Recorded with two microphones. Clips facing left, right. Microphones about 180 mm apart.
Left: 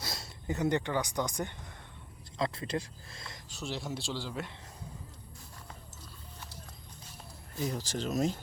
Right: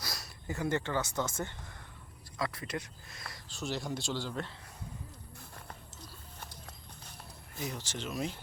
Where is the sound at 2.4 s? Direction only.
25° left (ahead or behind).